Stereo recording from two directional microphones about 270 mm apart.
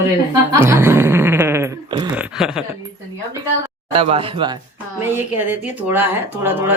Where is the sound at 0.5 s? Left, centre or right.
Centre.